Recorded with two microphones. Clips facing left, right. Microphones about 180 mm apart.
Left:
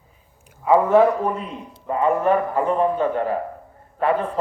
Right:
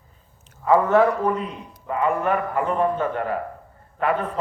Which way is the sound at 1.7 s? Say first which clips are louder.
Left 3 dB; 30° left (ahead or behind).